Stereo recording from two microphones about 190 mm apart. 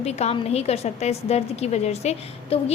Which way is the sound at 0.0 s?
35° left (ahead or behind).